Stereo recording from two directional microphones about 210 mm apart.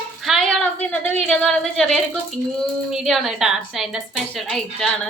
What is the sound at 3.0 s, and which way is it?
A woman's voice, centre (ahead or behind).